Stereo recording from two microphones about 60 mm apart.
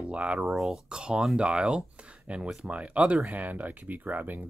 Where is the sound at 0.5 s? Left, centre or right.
Centre.